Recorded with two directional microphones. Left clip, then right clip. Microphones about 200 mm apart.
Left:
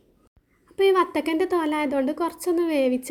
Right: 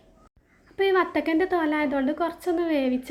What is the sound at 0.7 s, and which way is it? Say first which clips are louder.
A woman's voice: left 2 dB; 35° left (ahead or behind).